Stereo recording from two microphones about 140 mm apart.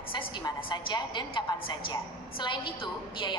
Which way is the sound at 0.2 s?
30° left (ahead or behind).